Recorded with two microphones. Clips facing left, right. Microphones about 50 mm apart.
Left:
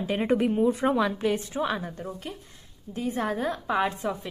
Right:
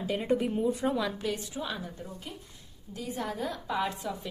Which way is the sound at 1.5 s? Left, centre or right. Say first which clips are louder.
Left 7 dB; left.